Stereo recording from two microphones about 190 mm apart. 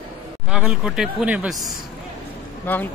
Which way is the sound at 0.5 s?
5° right (ahead or behind).